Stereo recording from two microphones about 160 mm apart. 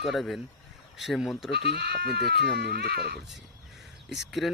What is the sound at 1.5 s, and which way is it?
Speech, 90° right.